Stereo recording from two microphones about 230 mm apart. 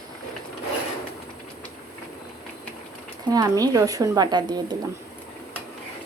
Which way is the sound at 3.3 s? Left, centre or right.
Centre.